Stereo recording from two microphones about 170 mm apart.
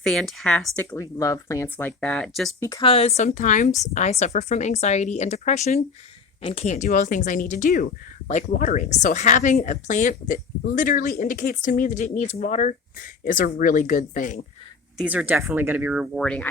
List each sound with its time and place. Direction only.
0.0 s speech: 5° left (ahead or behind)
0.9 s speech: 20° left (ahead or behind); by 2.5 s centre (ahead or behind)
2.6 s speech: 15° left (ahead or behind)
2.8 s speech: 35° left (ahead or behind); by 14.4 s 50° left (ahead or behind)
14.9 s speech: 10° right (ahead or behind)